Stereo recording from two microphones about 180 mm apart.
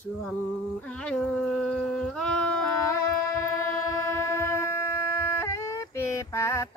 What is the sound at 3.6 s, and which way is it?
Train, 15° left (ahead or behind).